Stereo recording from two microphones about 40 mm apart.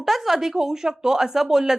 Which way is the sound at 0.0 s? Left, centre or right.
Centre.